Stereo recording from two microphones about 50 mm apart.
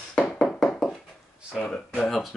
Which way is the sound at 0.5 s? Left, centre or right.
Centre.